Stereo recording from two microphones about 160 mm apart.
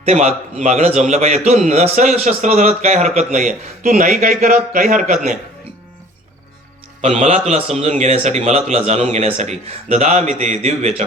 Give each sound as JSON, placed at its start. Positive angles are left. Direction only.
{"t": 0.0, "sound": "a man's voice", "side_deg": -45}
{"t": 7.0, "sound": "speech", "side_deg": -40}